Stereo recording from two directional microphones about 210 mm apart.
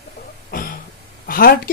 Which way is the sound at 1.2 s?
45° left (ahead or behind).